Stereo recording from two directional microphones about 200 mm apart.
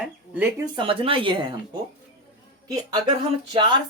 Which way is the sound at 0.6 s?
25° right (ahead or behind).